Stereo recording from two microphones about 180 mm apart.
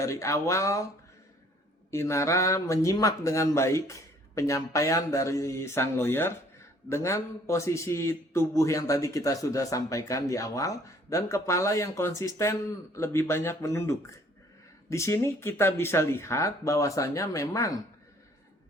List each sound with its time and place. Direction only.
0.0 s a man's voice: 15° left (ahead or behind)
1.9 s a man's voice: 15° left (ahead or behind)